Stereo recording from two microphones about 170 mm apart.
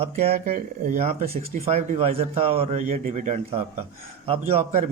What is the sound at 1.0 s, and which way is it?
A man's voice, 40° right (ahead or behind).